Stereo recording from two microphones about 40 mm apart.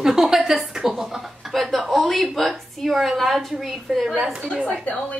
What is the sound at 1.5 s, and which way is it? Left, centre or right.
Speech, centre.